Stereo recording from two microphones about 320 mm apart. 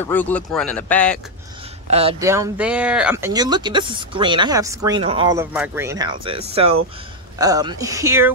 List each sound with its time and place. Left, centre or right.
0.0 s speech: centre
1.9 s speech: centre